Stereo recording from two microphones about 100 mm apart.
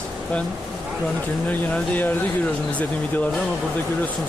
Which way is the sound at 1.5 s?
15° left (ahead or behind).